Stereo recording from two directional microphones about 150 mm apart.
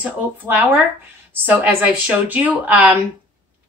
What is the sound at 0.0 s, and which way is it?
Speech, 10° right (ahead or behind).